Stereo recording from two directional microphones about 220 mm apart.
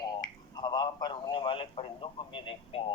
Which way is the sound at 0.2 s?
20° left (ahead or behind).